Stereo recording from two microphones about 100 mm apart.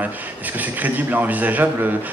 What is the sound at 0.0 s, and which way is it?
A man's voice, 15° right (ahead or behind).